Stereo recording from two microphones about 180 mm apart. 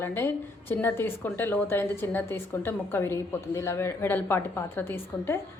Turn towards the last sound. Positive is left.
turn(degrees=10)  # may be behind; listen again after turning